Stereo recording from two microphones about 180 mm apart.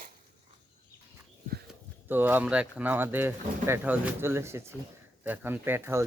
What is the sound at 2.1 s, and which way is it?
Speech, 10° right (ahead or behind).